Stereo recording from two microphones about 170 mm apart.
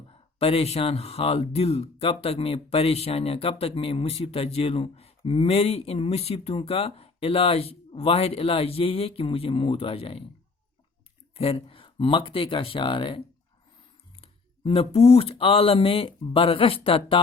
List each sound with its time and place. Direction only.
0.1 s speech: 35° left (ahead or behind)
11.3 s speech: 35° left (ahead or behind)